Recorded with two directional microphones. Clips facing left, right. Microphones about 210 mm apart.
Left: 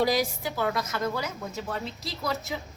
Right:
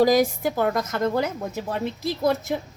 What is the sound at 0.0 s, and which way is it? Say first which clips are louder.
A woman's voice: right 7 dB; 50° right (ahead or behind).